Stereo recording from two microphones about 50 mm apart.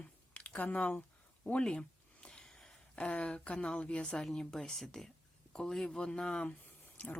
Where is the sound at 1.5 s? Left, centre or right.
Left.